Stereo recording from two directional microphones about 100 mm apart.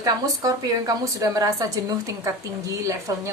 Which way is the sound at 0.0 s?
40° right (ahead or behind).